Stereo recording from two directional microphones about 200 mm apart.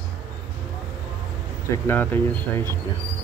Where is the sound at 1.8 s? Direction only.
10° left (ahead or behind).